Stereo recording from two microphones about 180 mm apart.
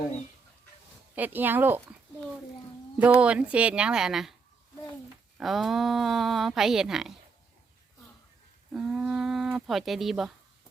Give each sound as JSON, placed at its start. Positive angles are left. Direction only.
{"t": 1.1, "sound": "a woman's voice", "side_deg": -10}
{"t": 3.0, "sound": "speech", "side_deg": -5}
{"t": 5.4, "sound": "speech", "side_deg": 0}
{"t": 8.7, "sound": "speech", "side_deg": -5}